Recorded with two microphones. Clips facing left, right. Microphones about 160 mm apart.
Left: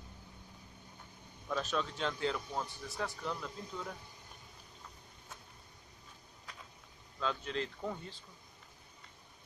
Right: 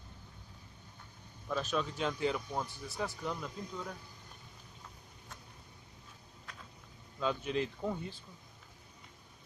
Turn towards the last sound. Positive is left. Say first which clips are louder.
# right 4 dB
turn(degrees=-10)  # may be behind; listen again after turning